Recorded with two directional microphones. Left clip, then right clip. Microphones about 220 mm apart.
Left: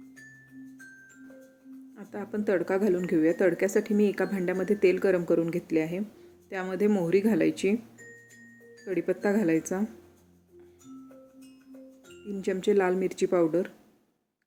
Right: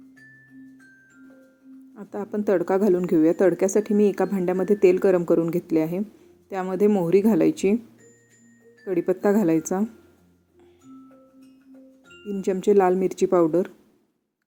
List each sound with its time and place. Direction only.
2.0 s speech: 10° right (ahead or behind)
8.8 s speech: 15° right (ahead or behind)
12.3 s speech: 15° right (ahead or behind)